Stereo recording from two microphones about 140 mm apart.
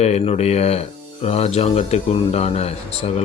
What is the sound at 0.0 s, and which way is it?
Speech, 50° left (ahead or behind).